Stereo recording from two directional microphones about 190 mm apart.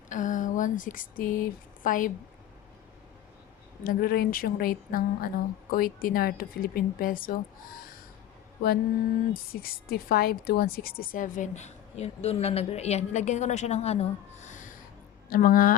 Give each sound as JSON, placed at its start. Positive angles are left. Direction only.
{"t": 0.1, "sound": "speech", "side_deg": 40}
{"t": 3.8, "sound": "speech", "side_deg": 50}
{"t": 9.3, "sound": "a woman's voice", "side_deg": 50}